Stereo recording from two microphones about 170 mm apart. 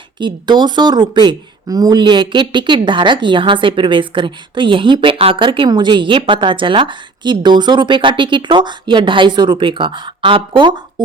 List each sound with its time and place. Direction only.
0.2 s speech: 25° right (ahead or behind)